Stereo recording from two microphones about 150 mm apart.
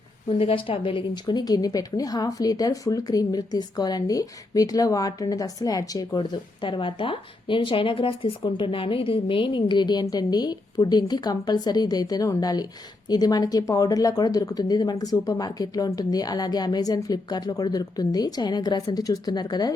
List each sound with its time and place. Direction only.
0.3 s a woman's voice: 35° left (ahead or behind)